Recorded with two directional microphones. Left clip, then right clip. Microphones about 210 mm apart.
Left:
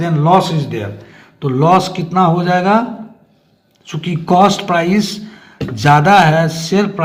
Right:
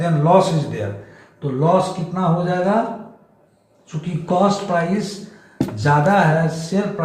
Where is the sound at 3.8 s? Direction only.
35° left (ahead or behind).